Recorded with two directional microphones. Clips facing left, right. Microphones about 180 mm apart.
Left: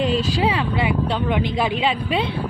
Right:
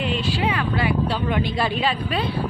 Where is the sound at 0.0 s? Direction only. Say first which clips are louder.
Left 4 dB; 35° left (ahead or behind).